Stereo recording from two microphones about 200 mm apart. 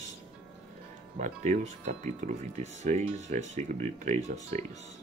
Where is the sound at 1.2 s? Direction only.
35° right (ahead or behind).